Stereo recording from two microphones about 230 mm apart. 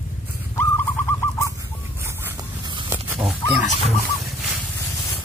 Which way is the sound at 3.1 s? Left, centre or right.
Centre.